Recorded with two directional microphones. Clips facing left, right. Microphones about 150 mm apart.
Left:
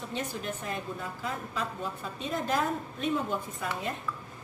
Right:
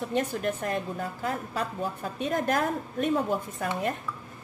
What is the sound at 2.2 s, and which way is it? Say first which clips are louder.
Speech: right 3 dB; 55° right (ahead or behind).